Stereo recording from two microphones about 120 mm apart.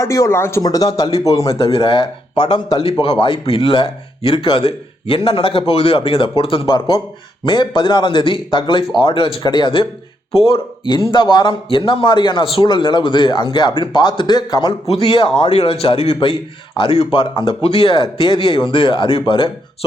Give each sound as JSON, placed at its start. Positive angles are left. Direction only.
{"t": 0.0, "sound": "speech", "side_deg": 25}
{"t": 1.5, "sound": "speech", "side_deg": 50}
{"t": 3.0, "sound": "a man's voice", "side_deg": 45}
{"t": 15.4, "sound": "a man's voice", "side_deg": 55}